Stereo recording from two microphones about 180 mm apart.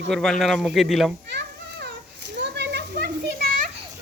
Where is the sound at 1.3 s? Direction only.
70° right (ahead or behind).